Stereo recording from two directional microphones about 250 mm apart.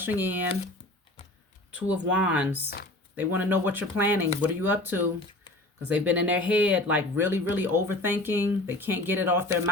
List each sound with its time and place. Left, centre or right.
0.0 s speech: centre
1.9 s speech: centre
2.6 s speech: left
3.2 s speech: centre